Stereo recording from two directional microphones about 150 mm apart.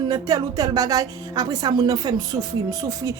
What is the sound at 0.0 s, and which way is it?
A woman's voice, 30° right (ahead or behind).